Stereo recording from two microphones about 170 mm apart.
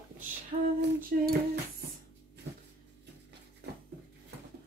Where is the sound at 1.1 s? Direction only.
60° right (ahead or behind).